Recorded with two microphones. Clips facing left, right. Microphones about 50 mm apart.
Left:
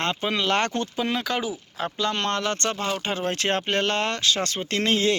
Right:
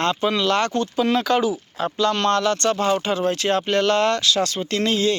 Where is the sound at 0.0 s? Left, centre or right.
Centre.